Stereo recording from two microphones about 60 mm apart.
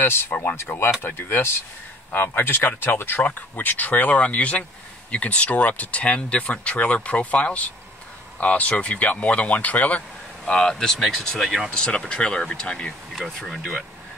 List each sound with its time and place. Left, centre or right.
0.0 s speech: left
10.4 s speech: centre
11.7 s speech: centre
13.1 s speech: centre